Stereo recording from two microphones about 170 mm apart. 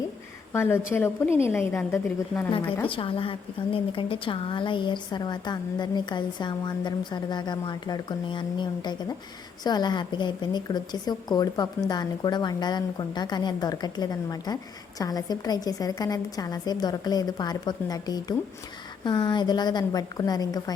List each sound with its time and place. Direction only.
0.5 s a woman's voice: 15° left (ahead or behind)
2.9 s a woman's voice: 30° left (ahead or behind)